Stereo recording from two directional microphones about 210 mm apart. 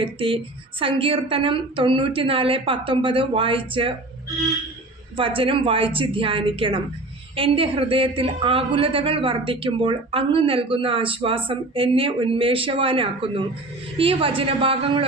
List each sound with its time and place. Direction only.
0.0 s a woman's voice: 25° right (ahead or behind)
5.1 s a woman's voice: 25° right (ahead or behind)